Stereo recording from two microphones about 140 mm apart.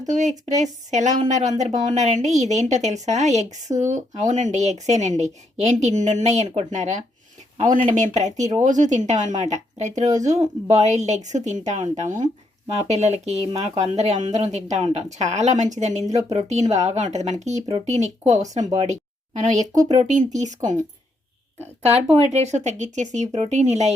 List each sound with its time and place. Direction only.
0.1 s speech: 60° right (ahead or behind)
12.7 s speech: 50° right (ahead or behind)
22.1 s speech: 50° right (ahead or behind)